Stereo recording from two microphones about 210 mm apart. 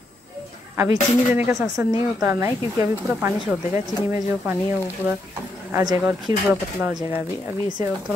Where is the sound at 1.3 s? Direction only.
10° right (ahead or behind).